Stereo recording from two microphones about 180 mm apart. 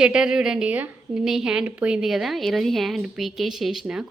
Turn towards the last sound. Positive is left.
turn(degrees=0)  # may be behind; listen again after turning